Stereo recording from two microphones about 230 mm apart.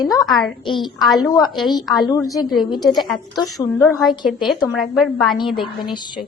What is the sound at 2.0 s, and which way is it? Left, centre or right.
Speech, centre.